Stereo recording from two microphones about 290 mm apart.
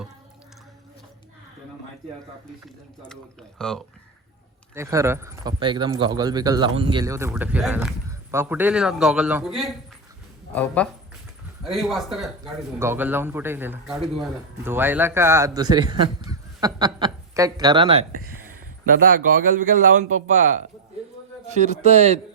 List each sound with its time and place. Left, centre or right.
3.6 s a man's voice: centre
4.7 s a man's voice: centre